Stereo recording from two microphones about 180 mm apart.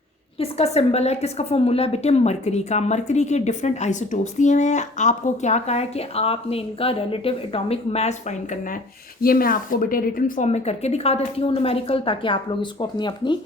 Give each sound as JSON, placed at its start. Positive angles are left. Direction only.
{"t": 0.3, "sound": "a woman's voice", "side_deg": 35}
{"t": 9.2, "sound": "a woman's voice", "side_deg": 55}